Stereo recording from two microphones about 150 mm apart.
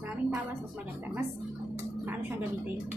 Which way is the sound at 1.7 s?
15° right (ahead or behind).